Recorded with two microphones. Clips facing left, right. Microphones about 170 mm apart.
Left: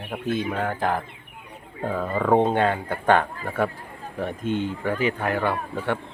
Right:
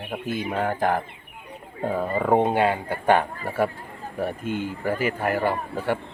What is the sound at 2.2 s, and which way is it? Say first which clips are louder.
A man's voice: left 1 dB; 15° right (ahead or behind).